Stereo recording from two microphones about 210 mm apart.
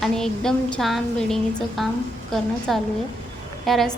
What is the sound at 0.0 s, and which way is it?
A woman's voice, 5° left (ahead or behind).